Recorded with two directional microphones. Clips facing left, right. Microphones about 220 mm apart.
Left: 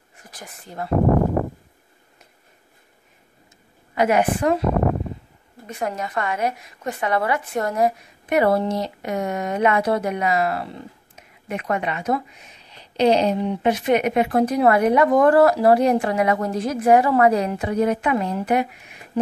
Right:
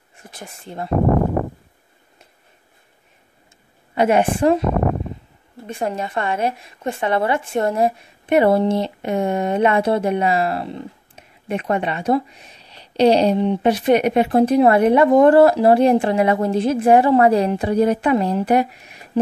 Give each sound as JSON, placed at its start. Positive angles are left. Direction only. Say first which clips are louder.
{"t": 0.2, "sound": "speech", "louder": "right 4 dB", "side_deg": -25}
{"t": 3.9, "sound": "a woman's voice", "louder": "right 2 dB", "side_deg": -30}
{"t": 5.7, "sound": "a woman's voice", "louder": "right 3 dB", "side_deg": -30}